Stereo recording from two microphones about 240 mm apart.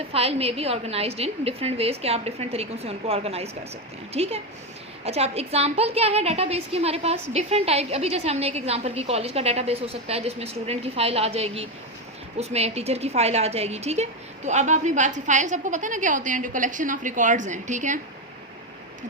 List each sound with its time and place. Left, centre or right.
0.1 s a woman's voice: right